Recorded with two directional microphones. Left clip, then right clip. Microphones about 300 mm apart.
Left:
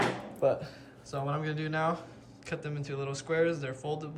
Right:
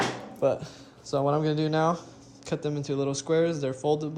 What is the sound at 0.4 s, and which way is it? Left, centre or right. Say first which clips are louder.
Speech: right 2 dB; right.